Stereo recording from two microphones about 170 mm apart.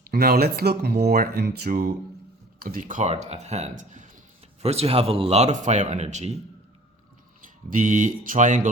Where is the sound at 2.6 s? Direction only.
55° right (ahead or behind).